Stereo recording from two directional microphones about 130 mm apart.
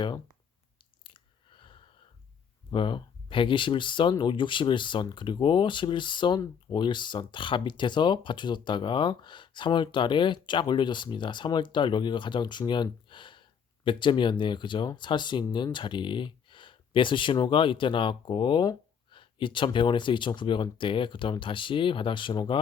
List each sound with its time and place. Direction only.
1.0 s chewing: 40° left (ahead or behind)
2.6 s speech: 40° left (ahead or behind)